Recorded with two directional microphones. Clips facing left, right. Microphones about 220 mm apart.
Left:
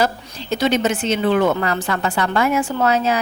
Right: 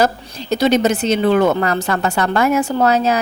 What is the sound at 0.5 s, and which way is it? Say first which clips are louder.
Speech: right 4 dB; 40° right (ahead or behind).